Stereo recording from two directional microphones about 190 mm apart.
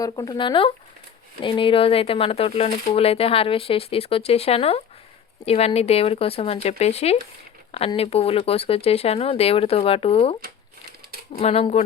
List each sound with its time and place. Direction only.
0.0 s speech: 20° left (ahead or behind)
11.3 s speech: 35° left (ahead or behind)